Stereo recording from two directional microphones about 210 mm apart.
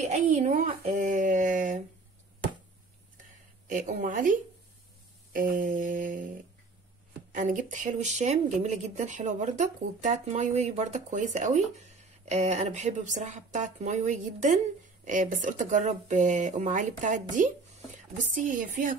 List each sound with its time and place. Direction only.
0.3 s speech: 40° right (ahead or behind)
3.6 s speech: 40° right (ahead or behind)
7.3 s speech: 35° right (ahead or behind)